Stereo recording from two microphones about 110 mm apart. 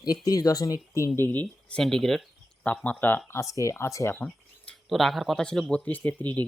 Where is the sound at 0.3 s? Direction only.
35° left (ahead or behind); by 1.8 s 15° left (ahead or behind).